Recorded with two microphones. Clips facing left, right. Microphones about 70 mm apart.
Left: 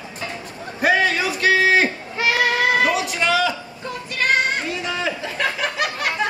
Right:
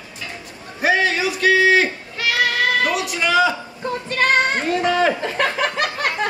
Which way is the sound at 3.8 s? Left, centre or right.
Right.